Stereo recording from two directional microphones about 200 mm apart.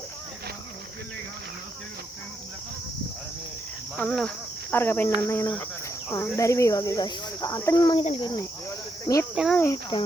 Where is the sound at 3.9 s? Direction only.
5° left (ahead or behind); by 8.5 s 20° left (ahead or behind).